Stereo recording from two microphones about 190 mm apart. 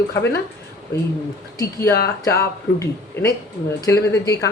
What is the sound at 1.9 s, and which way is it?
Speech, 55° left (ahead or behind).